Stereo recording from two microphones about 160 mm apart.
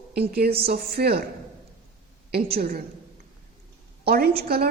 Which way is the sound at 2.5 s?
65° right (ahead or behind).